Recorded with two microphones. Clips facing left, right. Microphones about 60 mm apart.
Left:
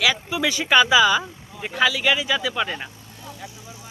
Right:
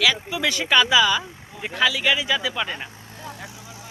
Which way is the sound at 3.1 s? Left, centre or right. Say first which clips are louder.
Right 2 dB; right.